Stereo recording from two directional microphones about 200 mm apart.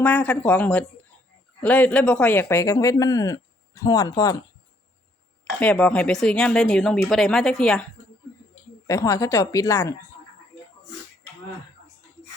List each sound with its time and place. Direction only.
0.0 s speech: 5° left (ahead or behind)
5.5 s a woman's voice: 5° left (ahead or behind)
8.9 s speech: 15° left (ahead or behind)